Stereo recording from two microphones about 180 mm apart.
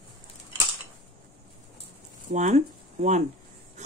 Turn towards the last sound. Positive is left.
turn(degrees=-40)  # may be behind; listen again after turning